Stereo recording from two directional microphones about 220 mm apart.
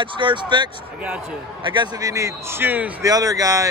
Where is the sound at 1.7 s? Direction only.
20° right (ahead or behind).